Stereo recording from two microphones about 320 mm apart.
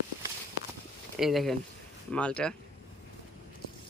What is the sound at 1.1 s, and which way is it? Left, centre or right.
Speech, centre.